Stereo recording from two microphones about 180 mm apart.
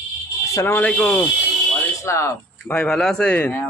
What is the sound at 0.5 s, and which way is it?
Speech, 15° left (ahead or behind).